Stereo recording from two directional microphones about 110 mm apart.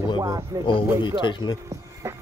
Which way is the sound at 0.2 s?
25° right (ahead or behind).